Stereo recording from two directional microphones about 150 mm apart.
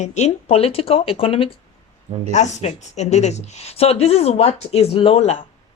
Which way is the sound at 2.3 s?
50° left (ahead or behind).